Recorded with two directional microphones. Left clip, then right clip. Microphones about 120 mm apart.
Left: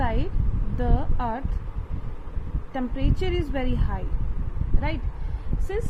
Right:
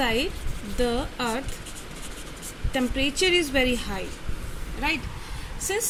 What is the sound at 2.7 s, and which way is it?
Speech, 20° right (ahead or behind).